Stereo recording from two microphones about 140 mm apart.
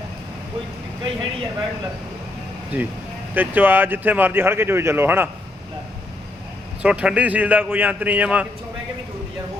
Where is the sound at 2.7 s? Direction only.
15° right (ahead or behind).